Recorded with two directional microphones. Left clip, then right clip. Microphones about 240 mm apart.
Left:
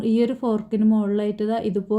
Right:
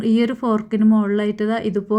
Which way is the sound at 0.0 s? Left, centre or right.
Centre.